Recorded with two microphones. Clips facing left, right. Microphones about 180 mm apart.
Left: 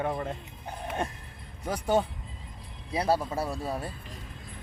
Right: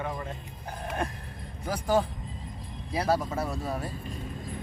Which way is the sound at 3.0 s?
30° left (ahead or behind).